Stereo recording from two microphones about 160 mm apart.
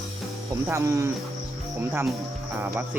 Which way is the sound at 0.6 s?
15° right (ahead or behind).